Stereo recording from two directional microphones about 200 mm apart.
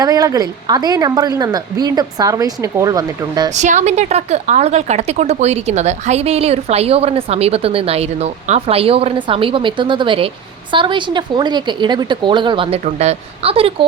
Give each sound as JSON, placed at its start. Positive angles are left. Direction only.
{"t": 0.0, "sound": "a woman's voice", "side_deg": -20}
{"t": 3.5, "sound": "a woman's voice", "side_deg": -35}